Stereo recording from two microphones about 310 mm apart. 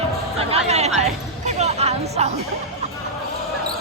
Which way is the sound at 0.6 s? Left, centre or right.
Right.